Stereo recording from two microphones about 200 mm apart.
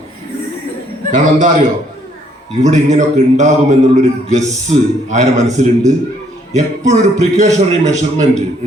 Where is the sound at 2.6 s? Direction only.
35° right (ahead or behind).